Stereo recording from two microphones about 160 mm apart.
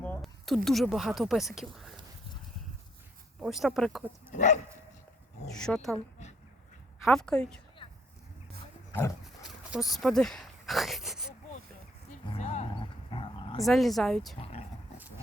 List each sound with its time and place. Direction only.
0.2 s speech: centre (ahead or behind)
3.4 s speech: centre (ahead or behind)
4.3 s speech: 50° left (ahead or behind)
5.5 s speech: 5° left (ahead or behind)
7.0 s speech: 5° left (ahead or behind)
9.2 s a sound: centre (ahead or behind)
12.4 s a sound: 45° left (ahead or behind)
12.8 s roaring cats: 30° left (ahead or behind)
13.7 s speech: centre (ahead or behind)
14.3 s dog: 40° left (ahead or behind)